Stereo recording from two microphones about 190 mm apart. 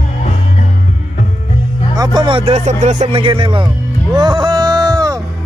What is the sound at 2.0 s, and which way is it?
Speech, 25° right (ahead or behind).